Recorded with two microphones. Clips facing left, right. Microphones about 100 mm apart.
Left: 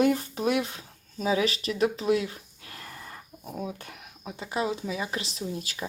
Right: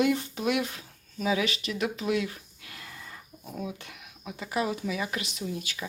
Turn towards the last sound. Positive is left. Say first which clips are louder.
# left 1 dB
turn(degrees=35)  # may be behind; listen again after turning